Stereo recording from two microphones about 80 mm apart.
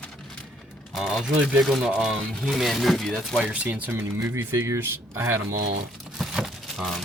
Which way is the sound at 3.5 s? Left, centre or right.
Centre.